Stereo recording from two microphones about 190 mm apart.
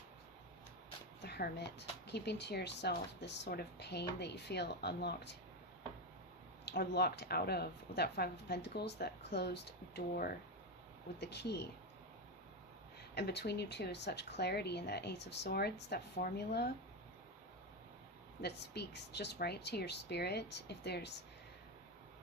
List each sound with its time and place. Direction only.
1.2 s speech: 60° left (ahead or behind)
6.7 s speech: 60° left (ahead or behind)
13.1 s speech: 60° left (ahead or behind)
18.4 s speech: 60° left (ahead or behind)